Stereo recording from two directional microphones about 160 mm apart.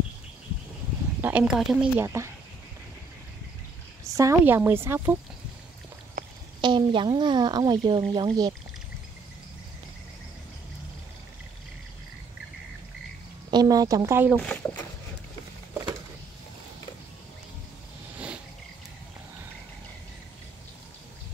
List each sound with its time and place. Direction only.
1.2 s a woman's voice: 5° right (ahead or behind)
2.0 s speech: 15° right (ahead or behind)
4.1 s speech: 20° right (ahead or behind)
6.2 s a sound: 65° right (ahead or behind)
6.6 s a woman's voice: 30° right (ahead or behind)
13.5 s a woman's voice: 25° right (ahead or behind)
14.3 s speech: 10° left (ahead or behind)
18.1 s cricket: 5° right (ahead or behind)